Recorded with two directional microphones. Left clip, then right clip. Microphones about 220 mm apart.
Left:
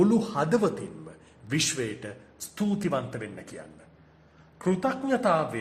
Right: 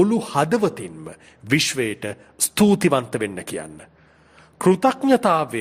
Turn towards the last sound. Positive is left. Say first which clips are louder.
# right 7 dB
turn(degrees=-45)  # may be behind; listen again after turning